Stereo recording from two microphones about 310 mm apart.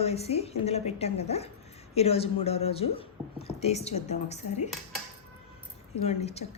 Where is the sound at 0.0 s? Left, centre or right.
Centre.